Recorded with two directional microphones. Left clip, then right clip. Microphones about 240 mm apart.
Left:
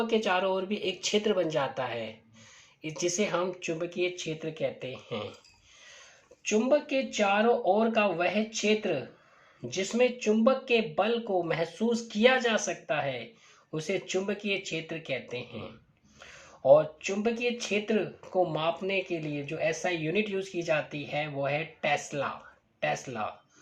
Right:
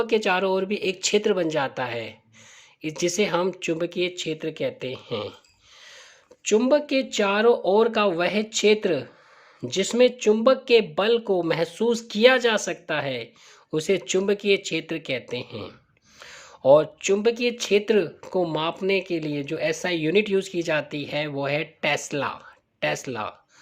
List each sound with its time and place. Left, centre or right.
0.0 s speech: right
6.4 s speech: right